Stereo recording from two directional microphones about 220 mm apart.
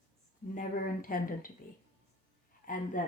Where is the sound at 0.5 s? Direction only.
40° left (ahead or behind).